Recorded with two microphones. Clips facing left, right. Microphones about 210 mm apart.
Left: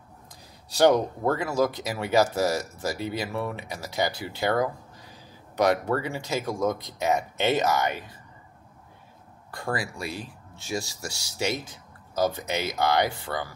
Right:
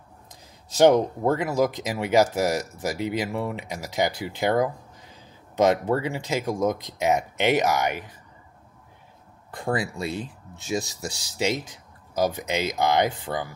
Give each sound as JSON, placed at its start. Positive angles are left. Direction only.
{"t": 0.7, "sound": "speech", "side_deg": -20}
{"t": 9.5, "sound": "speech", "side_deg": -20}